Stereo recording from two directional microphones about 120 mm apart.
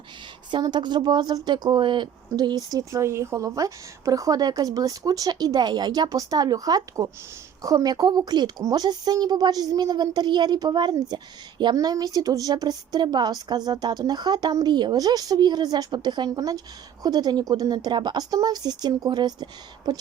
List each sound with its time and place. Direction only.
0.5 s a woman's voice: 40° right (ahead or behind)